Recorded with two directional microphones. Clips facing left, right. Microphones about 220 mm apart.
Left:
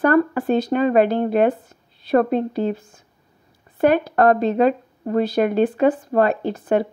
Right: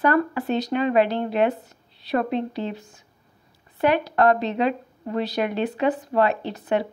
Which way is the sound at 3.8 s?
50° left (ahead or behind).